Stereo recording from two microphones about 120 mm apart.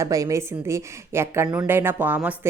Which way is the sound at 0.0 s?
25° right (ahead or behind).